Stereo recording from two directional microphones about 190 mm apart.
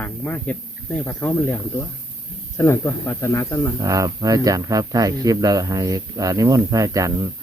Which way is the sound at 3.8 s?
15° right (ahead or behind).